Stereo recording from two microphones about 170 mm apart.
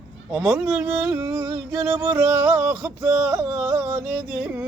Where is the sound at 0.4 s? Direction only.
5° right (ahead or behind).